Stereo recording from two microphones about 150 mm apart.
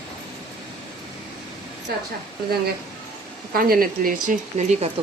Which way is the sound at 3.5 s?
75° right (ahead or behind).